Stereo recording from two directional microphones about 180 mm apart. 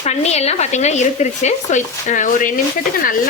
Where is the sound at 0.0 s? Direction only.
35° left (ahead or behind).